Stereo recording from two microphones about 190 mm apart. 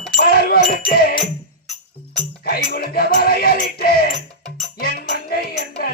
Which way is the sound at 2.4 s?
55° left (ahead or behind).